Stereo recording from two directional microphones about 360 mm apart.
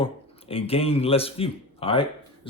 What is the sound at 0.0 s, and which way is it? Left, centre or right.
Speech, centre.